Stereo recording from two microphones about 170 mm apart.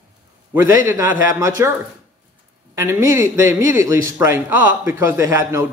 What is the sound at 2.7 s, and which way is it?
A man's voice, 15° right (ahead or behind).